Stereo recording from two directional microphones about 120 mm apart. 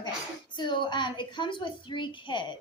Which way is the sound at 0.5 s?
40° left (ahead or behind).